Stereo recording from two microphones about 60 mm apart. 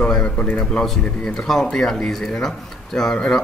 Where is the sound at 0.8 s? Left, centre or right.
Centre.